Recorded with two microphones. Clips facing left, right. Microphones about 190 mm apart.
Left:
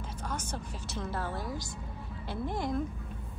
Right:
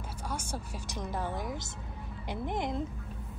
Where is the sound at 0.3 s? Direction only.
10° right (ahead or behind).